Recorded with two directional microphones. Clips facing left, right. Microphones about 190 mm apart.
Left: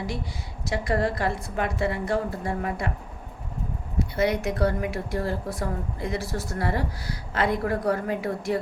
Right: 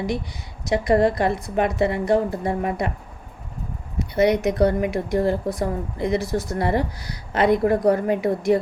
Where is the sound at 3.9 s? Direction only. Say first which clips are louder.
Right 6 dB; 20° right (ahead or behind).